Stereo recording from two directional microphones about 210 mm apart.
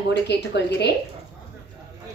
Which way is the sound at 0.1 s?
55° left (ahead or behind).